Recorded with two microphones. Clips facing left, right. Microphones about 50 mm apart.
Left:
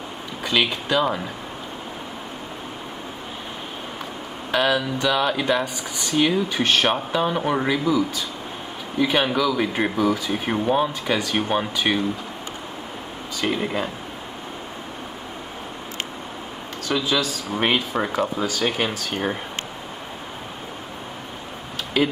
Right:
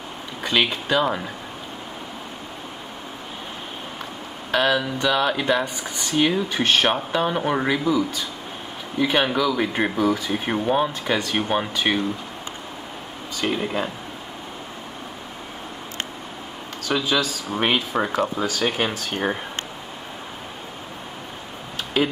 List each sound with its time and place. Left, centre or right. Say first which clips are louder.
0.4 s speech: even; centre
4.5 s speech: even; centre
13.4 s speech: even; centre
16.8 s speech: even; centre